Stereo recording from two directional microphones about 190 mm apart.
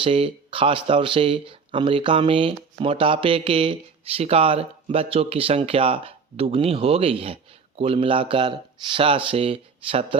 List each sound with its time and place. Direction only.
0.0 s speech: 30° right (ahead or behind)